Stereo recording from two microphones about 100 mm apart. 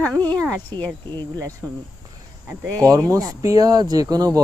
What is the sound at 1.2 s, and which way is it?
Speech, 40° right (ahead or behind).